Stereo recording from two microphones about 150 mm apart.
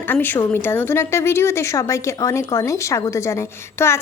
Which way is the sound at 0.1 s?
15° left (ahead or behind).